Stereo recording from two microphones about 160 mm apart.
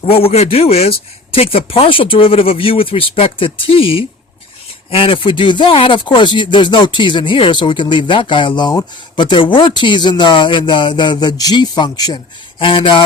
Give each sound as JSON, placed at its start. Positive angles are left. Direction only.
{"t": 0.0, "sound": "speech", "side_deg": 40}